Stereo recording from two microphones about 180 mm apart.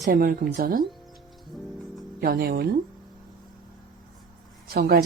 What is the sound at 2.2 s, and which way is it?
Speech, 55° right (ahead or behind).